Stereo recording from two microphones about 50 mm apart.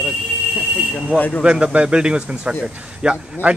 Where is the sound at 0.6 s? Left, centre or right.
Centre.